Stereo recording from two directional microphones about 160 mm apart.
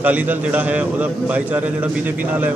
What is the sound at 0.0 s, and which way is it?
A man's voice, 10° right (ahead or behind).